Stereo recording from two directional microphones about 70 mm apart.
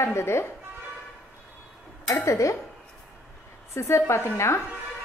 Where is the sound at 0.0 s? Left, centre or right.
Left.